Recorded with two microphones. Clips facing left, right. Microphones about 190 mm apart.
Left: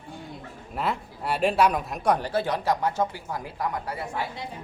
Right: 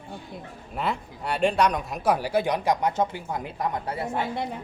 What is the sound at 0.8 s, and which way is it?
Speech, centre (ahead or behind).